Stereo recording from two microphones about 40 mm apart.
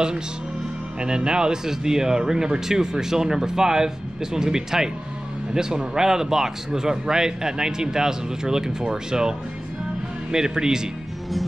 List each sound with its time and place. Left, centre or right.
1.0 s speech: right
10.3 s speech: centre